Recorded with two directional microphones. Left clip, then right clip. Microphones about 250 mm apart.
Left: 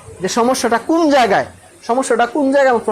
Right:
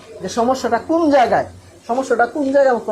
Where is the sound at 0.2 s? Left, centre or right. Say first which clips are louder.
Left 3 dB; left.